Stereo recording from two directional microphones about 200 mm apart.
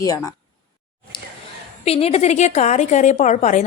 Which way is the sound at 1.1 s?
25° left (ahead or behind).